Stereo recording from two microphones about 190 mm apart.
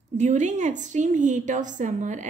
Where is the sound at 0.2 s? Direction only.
40° right (ahead or behind).